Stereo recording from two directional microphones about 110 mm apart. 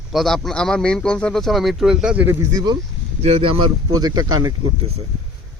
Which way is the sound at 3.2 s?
65° right (ahead or behind).